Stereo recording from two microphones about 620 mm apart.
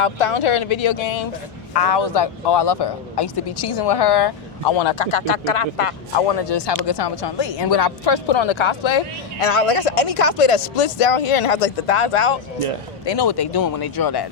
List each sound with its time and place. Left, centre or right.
0.0 s speech: left
6.5 s speech: left
13.1 s speech: left